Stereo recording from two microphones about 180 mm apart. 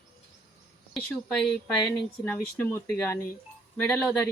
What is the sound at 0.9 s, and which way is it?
A woman's voice, 5° left (ahead or behind).